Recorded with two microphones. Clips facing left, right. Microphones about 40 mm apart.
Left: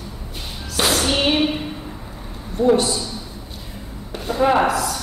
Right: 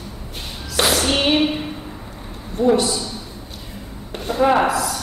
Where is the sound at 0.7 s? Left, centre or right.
Right.